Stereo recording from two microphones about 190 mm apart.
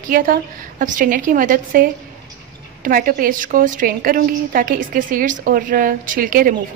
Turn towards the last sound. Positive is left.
turn(degrees=-45)  # may be behind; listen again after turning